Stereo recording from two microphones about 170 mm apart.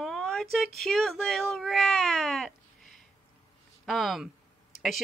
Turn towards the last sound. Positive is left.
turn(degrees=0)  # may be behind; listen again after turning